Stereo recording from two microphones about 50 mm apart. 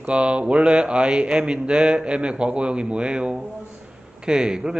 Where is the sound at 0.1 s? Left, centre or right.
Right.